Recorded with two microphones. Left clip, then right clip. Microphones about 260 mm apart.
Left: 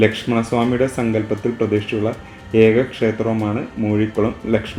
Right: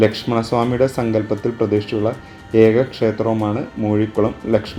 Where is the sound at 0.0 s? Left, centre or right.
Centre.